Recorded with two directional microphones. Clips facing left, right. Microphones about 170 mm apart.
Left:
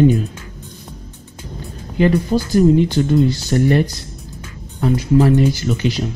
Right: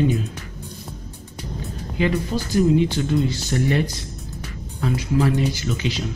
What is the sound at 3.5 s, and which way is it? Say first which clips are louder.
Speech: left 6 dB; 45° left (ahead or behind).